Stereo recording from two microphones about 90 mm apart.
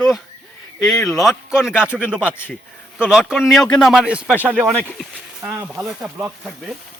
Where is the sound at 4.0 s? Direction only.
10° right (ahead or behind).